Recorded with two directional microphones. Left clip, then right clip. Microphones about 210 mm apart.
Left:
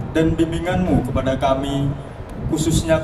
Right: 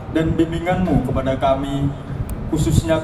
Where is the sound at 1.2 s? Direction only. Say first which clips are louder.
Even; 55° left (ahead or behind).